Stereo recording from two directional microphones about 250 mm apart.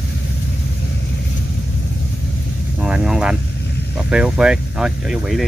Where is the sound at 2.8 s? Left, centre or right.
Centre.